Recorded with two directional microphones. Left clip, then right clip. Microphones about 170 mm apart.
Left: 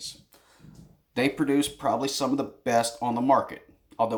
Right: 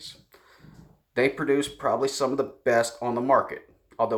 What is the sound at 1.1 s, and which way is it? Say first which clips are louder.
Speech: right 2 dB; 25° right (ahead or behind).